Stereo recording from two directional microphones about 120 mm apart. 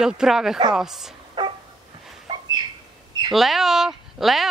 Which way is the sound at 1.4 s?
40° right (ahead or behind).